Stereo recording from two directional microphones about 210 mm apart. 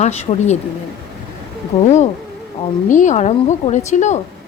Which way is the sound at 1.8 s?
35° left (ahead or behind).